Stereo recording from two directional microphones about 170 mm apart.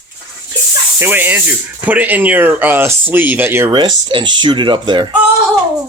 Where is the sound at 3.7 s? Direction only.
25° right (ahead or behind).